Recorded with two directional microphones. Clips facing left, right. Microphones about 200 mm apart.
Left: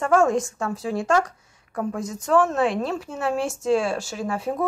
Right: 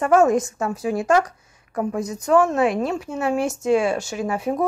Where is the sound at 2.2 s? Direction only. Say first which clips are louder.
Right 2 dB; centre (ahead or behind).